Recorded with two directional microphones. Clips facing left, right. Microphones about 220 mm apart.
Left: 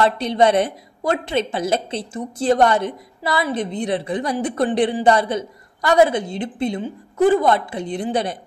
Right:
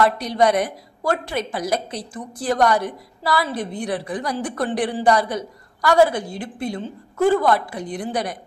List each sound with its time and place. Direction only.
0.0 s a woman's voice: 25° left (ahead or behind)